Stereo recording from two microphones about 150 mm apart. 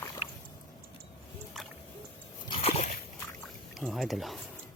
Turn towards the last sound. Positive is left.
turn(degrees=0)  # may be behind; listen again after turning